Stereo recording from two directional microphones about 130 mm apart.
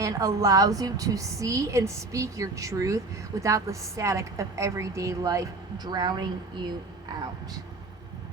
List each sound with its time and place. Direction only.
0.0 s a woman's voice: 25° right (ahead or behind)